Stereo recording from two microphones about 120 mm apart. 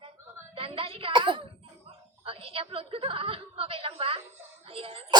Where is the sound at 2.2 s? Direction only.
50° right (ahead or behind).